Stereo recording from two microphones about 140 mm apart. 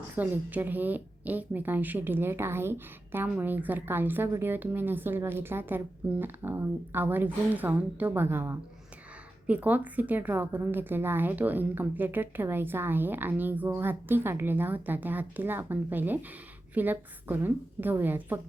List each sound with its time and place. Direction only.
0.2 s a woman's voice: 10° right (ahead or behind)